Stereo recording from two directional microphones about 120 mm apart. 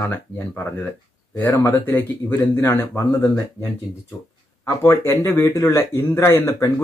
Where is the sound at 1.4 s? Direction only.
20° left (ahead or behind).